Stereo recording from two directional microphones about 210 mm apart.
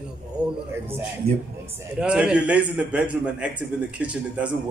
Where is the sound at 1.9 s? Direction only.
5° right (ahead or behind).